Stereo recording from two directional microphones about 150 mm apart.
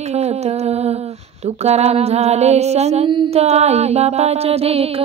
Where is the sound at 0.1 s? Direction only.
45° right (ahead or behind).